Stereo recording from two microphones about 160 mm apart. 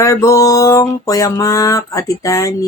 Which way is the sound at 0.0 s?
20° left (ahead or behind).